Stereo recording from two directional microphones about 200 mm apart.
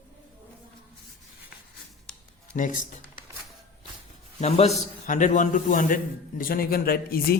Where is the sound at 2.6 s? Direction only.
40° left (ahead or behind).